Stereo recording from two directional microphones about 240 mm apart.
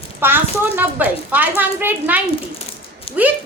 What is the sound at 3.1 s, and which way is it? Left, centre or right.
Speech, left.